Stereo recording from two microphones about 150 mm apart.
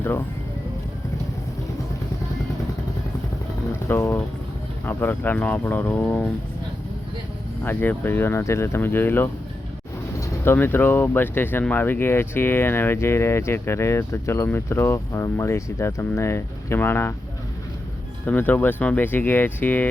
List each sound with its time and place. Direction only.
3.8 s speech: 15° left (ahead or behind)
7.6 s speech: 15° left (ahead or behind)
18.3 s speech: 10° left (ahead or behind)